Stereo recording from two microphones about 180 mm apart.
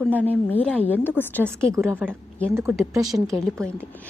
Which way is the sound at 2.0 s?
Centre (ahead or behind).